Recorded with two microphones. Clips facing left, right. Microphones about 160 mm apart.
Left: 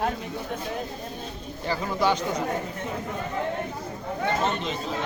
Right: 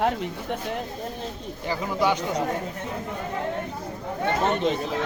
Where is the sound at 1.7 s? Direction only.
10° right (ahead or behind).